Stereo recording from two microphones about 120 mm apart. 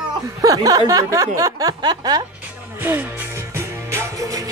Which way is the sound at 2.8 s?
20° right (ahead or behind).